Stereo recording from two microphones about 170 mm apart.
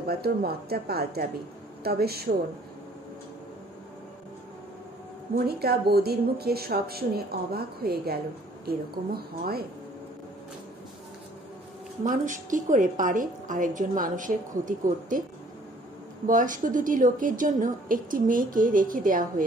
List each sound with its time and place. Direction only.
0.0 s speech: 65° right (ahead or behind)
5.4 s speech: 65° right (ahead or behind)
12.0 s a woman's voice: 50° right (ahead or behind)
16.3 s a woman's voice: 50° right (ahead or behind)